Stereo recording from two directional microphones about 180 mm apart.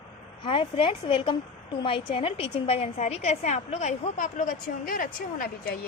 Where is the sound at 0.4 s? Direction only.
30° left (ahead or behind).